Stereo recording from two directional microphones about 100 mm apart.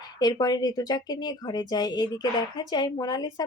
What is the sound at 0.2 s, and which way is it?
A woman's voice, 40° left (ahead or behind).